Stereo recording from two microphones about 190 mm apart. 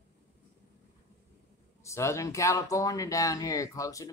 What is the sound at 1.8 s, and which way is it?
Speech, 15° left (ahead or behind).